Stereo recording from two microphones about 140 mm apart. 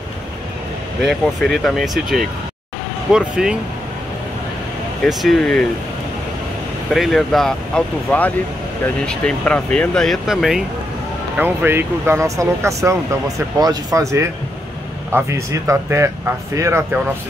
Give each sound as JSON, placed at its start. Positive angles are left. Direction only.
{"t": 1.0, "sound": "speech", "side_deg": 0}
{"t": 5.0, "sound": "speech", "side_deg": 0}
{"t": 6.9, "sound": "speech", "side_deg": 0}
{"t": 11.3, "sound": "speech", "side_deg": -15}